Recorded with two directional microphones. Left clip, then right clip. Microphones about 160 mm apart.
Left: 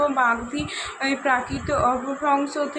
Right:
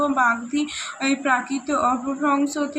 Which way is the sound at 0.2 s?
15° right (ahead or behind).